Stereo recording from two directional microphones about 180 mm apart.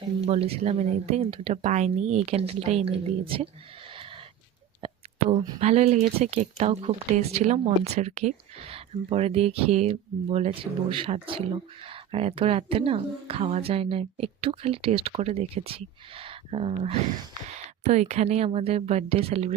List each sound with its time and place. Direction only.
0.2 s speech: 35° right (ahead or behind)
3.9 s a sound: 30° right (ahead or behind)
5.5 s speech: 35° right (ahead or behind)